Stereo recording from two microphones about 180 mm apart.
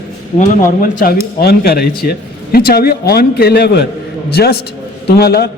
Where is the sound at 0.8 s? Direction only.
55° left (ahead or behind).